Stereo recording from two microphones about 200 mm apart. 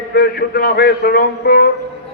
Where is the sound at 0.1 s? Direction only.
50° left (ahead or behind).